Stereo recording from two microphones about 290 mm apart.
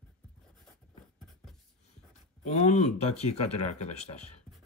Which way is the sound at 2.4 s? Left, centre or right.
Left.